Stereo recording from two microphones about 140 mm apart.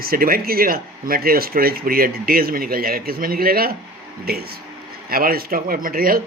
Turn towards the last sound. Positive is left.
turn(degrees=-90)